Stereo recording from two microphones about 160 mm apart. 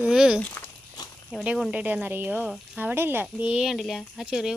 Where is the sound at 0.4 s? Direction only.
10° left (ahead or behind).